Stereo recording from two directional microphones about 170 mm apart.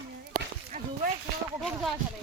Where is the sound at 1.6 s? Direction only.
Centre (ahead or behind).